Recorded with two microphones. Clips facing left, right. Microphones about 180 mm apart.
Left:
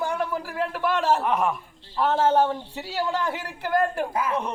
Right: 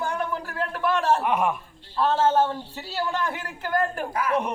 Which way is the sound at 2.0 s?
10° left (ahead or behind).